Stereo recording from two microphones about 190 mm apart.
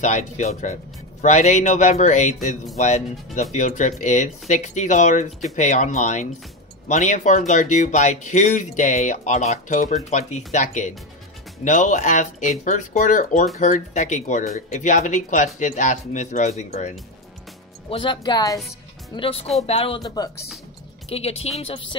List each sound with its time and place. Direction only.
0.0 s speech: 40° left (ahead or behind)
2.3 s speech: centre (ahead or behind)
2.8 s speech: 35° left (ahead or behind)